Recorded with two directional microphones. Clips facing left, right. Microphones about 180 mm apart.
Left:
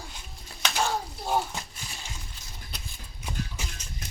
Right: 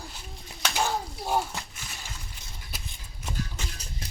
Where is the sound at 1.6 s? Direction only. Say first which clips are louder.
Left 1 dB; 15° left (ahead or behind).